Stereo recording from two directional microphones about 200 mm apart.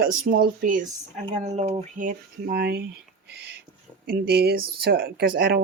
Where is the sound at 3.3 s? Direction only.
55° right (ahead or behind).